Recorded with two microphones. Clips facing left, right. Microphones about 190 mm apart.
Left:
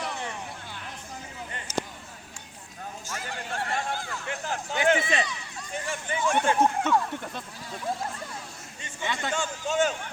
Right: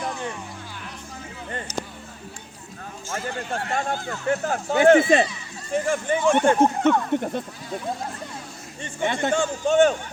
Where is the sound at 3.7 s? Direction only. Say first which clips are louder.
Right 7 dB; 45° right (ahead or behind).